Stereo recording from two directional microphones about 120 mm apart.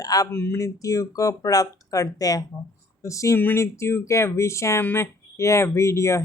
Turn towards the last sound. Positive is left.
turn(degrees=25)  # may be behind; listen again after turning